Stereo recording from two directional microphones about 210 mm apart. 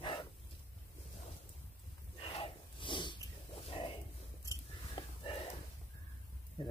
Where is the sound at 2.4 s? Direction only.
25° left (ahead or behind).